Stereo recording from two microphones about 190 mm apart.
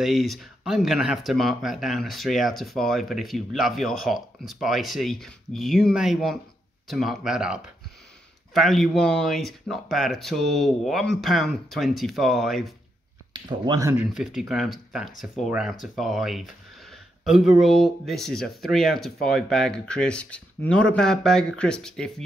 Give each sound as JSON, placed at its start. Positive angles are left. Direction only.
{"t": 0.0, "sound": "speech", "side_deg": 0}
{"t": 13.3, "sound": "speech", "side_deg": -20}
{"t": 14.1, "sound": "speech", "side_deg": -5}